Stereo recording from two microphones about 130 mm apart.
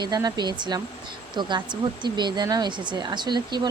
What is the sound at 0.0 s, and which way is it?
Speech, 30° right (ahead or behind).